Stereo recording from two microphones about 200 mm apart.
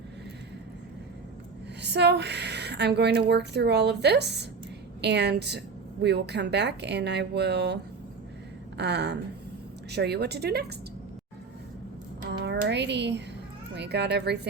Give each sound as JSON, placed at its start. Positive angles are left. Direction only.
{"t": 1.8, "sound": "a woman's voice", "side_deg": -60}
{"t": 8.8, "sound": "a woman's voice", "side_deg": -60}
{"t": 12.2, "sound": "a woman's voice", "side_deg": -55}